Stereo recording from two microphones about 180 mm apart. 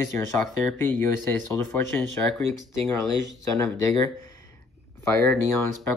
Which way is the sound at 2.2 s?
10° left (ahead or behind).